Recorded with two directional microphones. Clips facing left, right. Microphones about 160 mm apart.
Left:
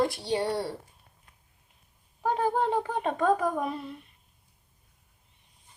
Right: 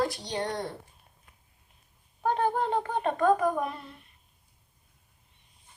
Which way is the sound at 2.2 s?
5° left (ahead or behind).